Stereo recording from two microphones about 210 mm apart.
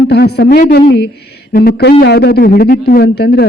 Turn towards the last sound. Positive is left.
turn(degrees=50)  # may be behind; listen again after turning